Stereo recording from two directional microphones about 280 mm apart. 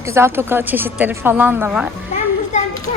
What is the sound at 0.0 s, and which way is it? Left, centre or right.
A woman's voice, centre.